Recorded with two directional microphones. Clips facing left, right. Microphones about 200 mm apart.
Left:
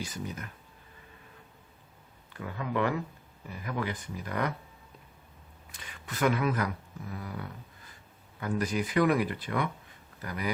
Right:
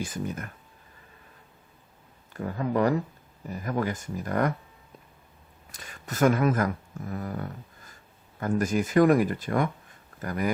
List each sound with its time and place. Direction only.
0.0 s speech: 50° right (ahead or behind)
2.3 s speech: 40° right (ahead or behind)
5.7 s speech: 45° right (ahead or behind)